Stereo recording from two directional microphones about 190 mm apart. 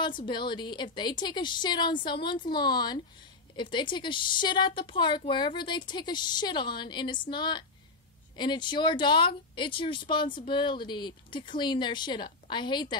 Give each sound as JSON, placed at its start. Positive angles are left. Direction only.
{"t": 0.0, "sound": "a woman's voice", "side_deg": 25}